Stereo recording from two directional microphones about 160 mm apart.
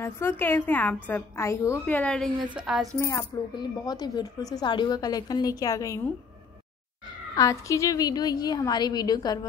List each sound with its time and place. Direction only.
0.0 s a woman's voice: 15° left (ahead or behind); by 2.9 s 5° right (ahead or behind)
3.0 s a woman's voice: 20° left (ahead or behind)
7.3 s a woman's voice: 20° left (ahead or behind)